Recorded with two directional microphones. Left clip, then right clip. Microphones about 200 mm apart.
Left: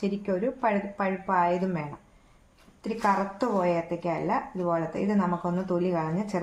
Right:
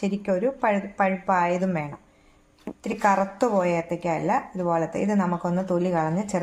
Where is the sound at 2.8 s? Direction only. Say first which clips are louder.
Right 4 dB; 30° right (ahead or behind).